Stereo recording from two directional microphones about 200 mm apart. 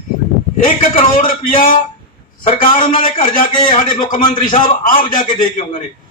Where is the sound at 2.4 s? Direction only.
25° left (ahead or behind).